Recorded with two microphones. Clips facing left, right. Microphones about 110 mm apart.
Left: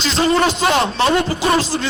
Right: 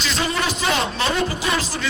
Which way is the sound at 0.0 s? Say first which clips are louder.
Left 8 dB; 30° left (ahead or behind).